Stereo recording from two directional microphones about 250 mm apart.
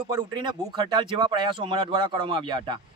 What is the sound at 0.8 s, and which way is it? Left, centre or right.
Speech, centre.